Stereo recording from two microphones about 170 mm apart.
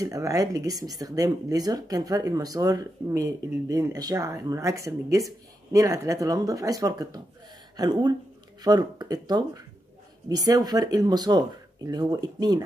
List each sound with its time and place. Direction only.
0.0 s speech: 20° right (ahead or behind)